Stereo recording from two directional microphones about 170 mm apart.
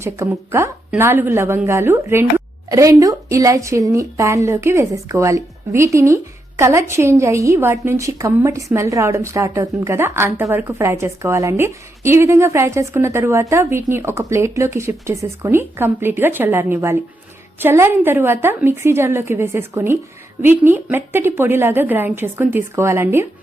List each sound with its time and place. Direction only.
0.0 s a woman's voice: 15° right (ahead or behind)